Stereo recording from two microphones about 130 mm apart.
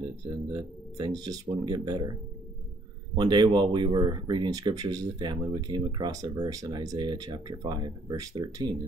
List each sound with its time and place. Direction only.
0.0 s speech: 35° right (ahead or behind)
3.2 s speech: 35° right (ahead or behind)